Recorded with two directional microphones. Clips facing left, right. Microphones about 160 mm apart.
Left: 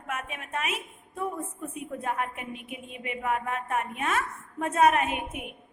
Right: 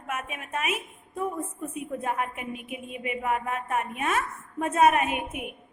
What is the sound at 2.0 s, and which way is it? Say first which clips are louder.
A woman's voice: even; 15° right (ahead or behind).